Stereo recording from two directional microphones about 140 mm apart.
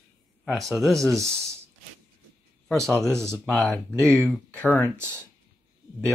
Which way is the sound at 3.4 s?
5° left (ahead or behind).